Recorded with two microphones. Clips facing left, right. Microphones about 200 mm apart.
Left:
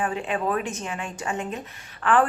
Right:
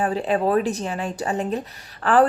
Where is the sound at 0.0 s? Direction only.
35° right (ahead or behind).